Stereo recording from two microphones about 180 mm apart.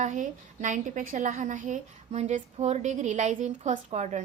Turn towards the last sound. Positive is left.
turn(degrees=-40)  # may be behind; listen again after turning